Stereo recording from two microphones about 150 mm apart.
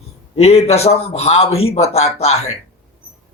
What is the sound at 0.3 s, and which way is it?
A man's voice, 45° left (ahead or behind).